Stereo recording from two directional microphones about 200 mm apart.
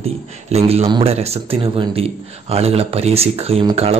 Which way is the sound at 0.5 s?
30° right (ahead or behind).